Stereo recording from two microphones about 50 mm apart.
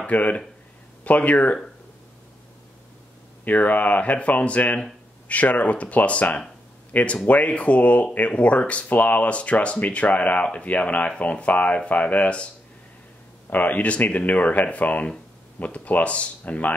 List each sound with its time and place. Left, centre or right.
0.0 s speech: left
3.4 s speech: left
13.5 s speech: left